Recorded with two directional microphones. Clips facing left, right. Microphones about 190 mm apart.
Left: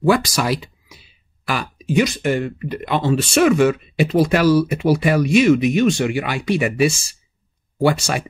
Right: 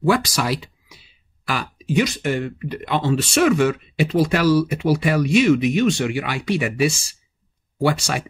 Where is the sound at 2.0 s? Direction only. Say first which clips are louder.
Left 3 dB; 45° left (ahead or behind).